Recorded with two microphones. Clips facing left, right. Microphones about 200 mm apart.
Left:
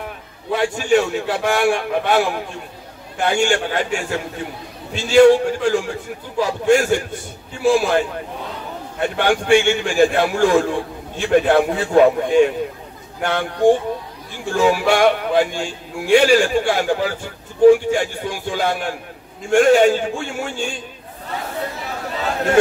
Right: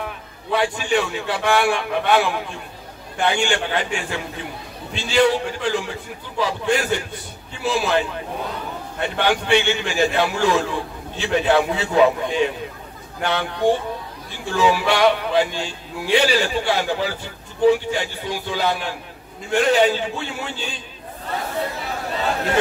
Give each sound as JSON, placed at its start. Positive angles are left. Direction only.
{"t": 0.5, "sound": "a man's voice", "side_deg": 45}
{"t": 9.2, "sound": "a man's voice", "side_deg": 50}